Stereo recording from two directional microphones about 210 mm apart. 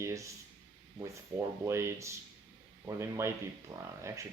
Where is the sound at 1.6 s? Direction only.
15° right (ahead or behind).